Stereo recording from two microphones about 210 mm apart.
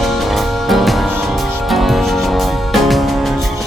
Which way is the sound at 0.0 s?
Centre (ahead or behind).